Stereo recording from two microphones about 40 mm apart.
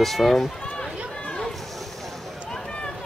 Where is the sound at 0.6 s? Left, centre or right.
Left.